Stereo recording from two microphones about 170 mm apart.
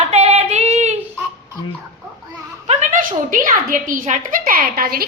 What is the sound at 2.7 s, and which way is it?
A woman's voice, 40° right (ahead or behind).